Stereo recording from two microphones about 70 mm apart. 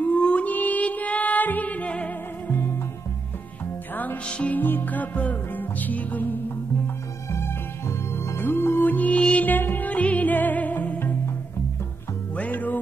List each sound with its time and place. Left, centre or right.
0.0 s music: centre
3.9 s music: left
7.2 s music: left
12.4 s music: left